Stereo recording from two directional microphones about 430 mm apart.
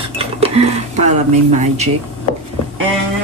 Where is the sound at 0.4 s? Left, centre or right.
Centre.